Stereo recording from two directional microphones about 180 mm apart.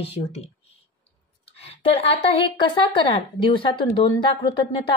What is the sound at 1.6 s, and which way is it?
A woman's voice, 35° left (ahead or behind).